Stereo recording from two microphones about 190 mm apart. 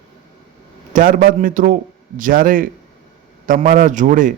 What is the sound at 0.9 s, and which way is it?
A man's voice, 45° right (ahead or behind).